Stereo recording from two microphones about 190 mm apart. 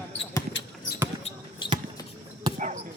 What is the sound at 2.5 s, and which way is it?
Basketball bounce, 20° right (ahead or behind).